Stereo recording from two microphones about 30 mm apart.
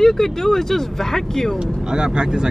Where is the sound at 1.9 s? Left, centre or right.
Right.